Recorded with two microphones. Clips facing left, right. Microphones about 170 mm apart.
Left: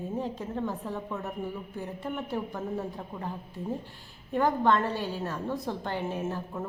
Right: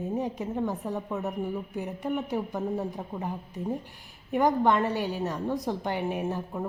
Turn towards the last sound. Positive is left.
turn(degrees=-15)  # may be behind; listen again after turning